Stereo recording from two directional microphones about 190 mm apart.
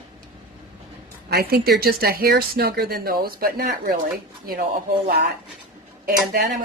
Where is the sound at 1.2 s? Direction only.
55° right (ahead or behind).